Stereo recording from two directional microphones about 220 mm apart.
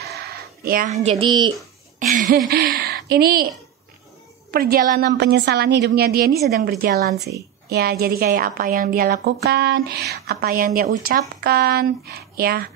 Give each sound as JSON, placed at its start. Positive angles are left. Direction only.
{"t": 0.0, "sound": "a sound", "side_deg": -45}
{"t": 1.0, "sound": "speech", "side_deg": -20}
{"t": 2.0, "sound": "a woman's voice", "side_deg": -35}
{"t": 4.5, "sound": "a woman's voice", "side_deg": -45}